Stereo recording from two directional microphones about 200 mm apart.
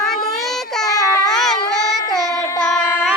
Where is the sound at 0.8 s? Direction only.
15° left (ahead or behind).